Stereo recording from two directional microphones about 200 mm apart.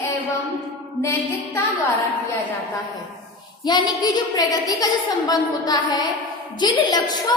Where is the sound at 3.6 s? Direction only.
20° left (ahead or behind).